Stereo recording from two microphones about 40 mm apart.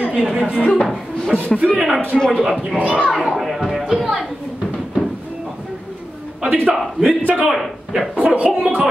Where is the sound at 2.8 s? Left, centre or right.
Right.